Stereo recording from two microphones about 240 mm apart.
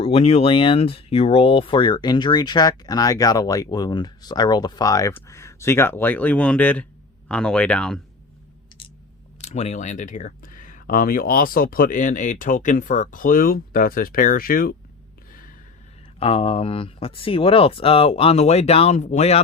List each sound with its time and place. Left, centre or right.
0.0 s speech: left; by 8.0 s centre
9.4 s speech: left
15.3 s gasp: left
16.1 s speech: left